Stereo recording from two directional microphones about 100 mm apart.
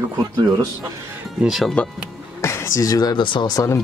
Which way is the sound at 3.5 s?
30° left (ahead or behind).